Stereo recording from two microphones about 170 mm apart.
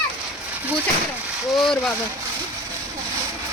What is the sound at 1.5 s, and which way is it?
Speech, centre (ahead or behind).